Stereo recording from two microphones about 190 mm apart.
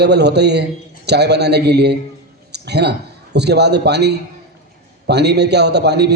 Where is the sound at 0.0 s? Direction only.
60° right (ahead or behind).